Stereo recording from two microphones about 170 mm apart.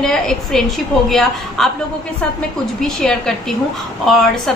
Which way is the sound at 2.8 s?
5° left (ahead or behind).